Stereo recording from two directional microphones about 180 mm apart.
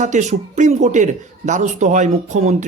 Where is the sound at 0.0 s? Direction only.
40° right (ahead or behind).